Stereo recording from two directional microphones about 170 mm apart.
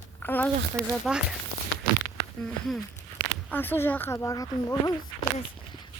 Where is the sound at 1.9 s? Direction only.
70° right (ahead or behind).